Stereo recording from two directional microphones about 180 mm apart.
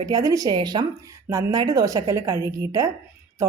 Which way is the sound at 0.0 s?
20° right (ahead or behind).